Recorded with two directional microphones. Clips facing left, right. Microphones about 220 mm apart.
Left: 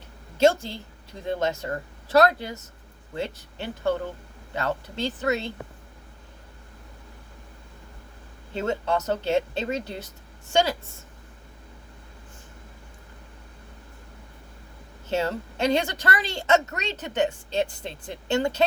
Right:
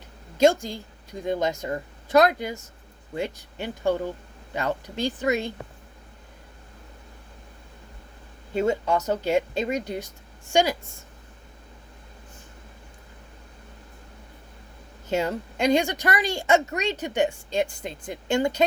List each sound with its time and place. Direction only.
0.3 s a woman's voice: 15° right (ahead or behind)
8.5 s a woman's voice: 10° right (ahead or behind)
15.1 s a woman's voice: 15° right (ahead or behind)